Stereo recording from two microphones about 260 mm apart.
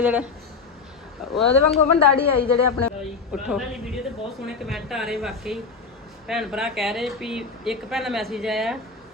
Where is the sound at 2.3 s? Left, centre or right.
Left.